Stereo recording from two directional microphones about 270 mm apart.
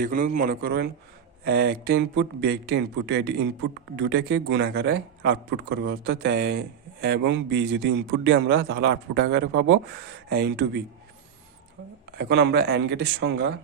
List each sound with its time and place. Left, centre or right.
0.0 s a man's voice: right
12.1 s a man's voice: right